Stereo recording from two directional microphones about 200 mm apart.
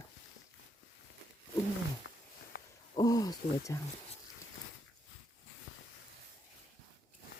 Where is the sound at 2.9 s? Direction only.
20° left (ahead or behind).